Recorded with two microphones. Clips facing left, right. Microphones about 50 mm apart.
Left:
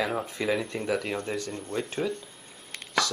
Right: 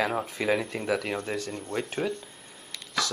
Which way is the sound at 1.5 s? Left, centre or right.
Centre.